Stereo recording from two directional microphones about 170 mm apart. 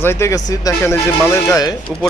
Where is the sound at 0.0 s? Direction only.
15° left (ahead or behind).